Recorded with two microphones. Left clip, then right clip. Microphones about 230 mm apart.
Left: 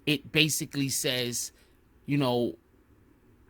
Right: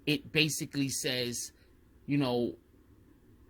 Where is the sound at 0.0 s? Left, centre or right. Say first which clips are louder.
Left 4 dB; left.